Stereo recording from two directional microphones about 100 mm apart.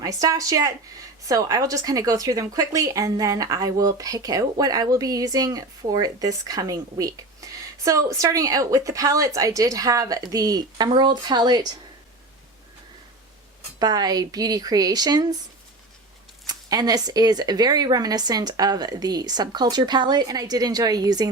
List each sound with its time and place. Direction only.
0.0 s a woman's voice: 35° right (ahead or behind)
13.7 s a woman's voice: 40° right (ahead or behind)
16.5 s a woman's voice: 40° right (ahead or behind)